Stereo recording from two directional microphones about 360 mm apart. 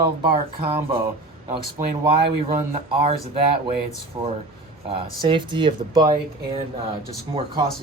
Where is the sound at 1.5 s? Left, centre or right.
Centre.